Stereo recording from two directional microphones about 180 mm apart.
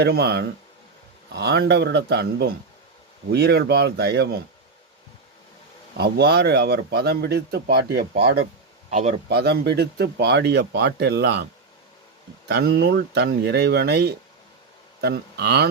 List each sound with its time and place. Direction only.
0.0 s speech: 65° right (ahead or behind)
6.0 s speech: 65° right (ahead or behind)
8.9 s speech: 40° right (ahead or behind)
9.3 s speech: 65° right (ahead or behind)
12.5 s speech: 65° right (ahead or behind)